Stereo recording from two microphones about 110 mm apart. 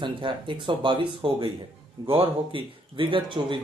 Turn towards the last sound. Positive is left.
turn(degrees=-50)  # may be behind; listen again after turning